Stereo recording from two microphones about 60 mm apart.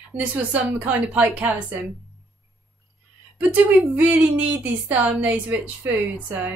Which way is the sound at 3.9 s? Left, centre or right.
Right.